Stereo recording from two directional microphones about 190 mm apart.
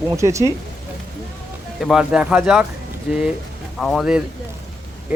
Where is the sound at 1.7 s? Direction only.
5° right (ahead or behind).